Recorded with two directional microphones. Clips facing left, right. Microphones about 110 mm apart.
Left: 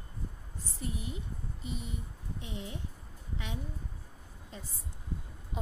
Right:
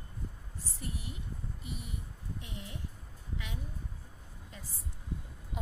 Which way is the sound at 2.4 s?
25° left (ahead or behind).